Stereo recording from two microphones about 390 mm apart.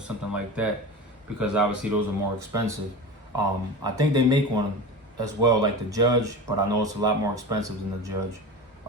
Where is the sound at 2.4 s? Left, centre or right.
Centre.